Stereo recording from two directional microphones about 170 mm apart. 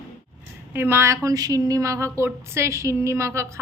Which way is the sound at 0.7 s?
15° right (ahead or behind).